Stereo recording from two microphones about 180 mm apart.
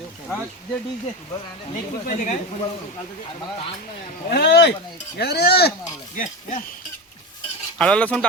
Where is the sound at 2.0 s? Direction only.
45° left (ahead or behind).